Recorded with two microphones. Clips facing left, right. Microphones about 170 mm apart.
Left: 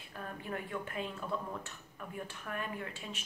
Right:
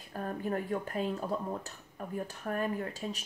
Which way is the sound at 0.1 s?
40° right (ahead or behind).